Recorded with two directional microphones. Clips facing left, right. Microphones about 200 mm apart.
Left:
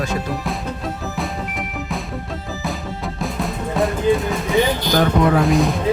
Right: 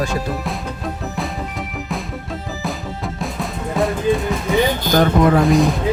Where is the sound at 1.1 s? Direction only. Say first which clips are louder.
Even; centre (ahead or behind).